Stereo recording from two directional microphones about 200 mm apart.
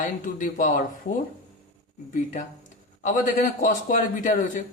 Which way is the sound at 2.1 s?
40° left (ahead or behind).